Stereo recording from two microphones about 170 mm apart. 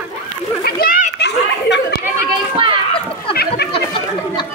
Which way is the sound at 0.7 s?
60° left (ahead or behind).